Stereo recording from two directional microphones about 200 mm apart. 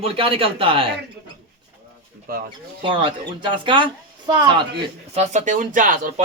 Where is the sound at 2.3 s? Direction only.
50° right (ahead or behind).